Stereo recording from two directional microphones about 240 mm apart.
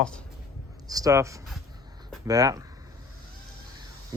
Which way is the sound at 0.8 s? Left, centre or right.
Centre.